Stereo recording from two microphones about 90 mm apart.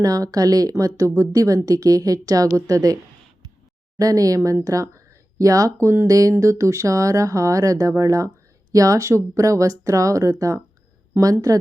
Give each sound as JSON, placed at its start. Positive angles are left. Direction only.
{"t": 0.0, "sound": "speech", "side_deg": -40}